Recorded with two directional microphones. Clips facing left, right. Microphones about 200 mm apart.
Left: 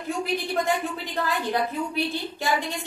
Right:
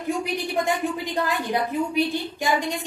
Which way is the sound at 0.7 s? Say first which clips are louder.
Right 2 dB; 15° right (ahead or behind).